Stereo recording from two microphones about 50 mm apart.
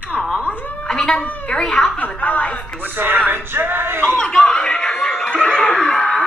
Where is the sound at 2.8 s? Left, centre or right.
Right.